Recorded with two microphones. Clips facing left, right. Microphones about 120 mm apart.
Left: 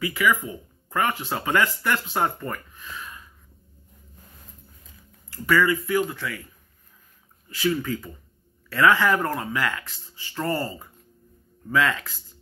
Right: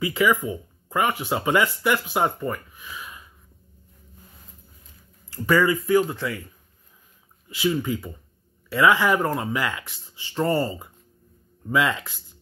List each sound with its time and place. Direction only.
0.0 s speech: 25° right (ahead or behind)
5.3 s speech: 25° right (ahead or behind)
7.4 s speech: 15° right (ahead or behind)